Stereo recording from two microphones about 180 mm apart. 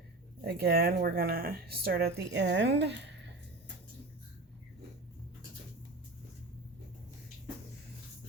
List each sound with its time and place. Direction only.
0.4 s speech: 60° right (ahead or behind)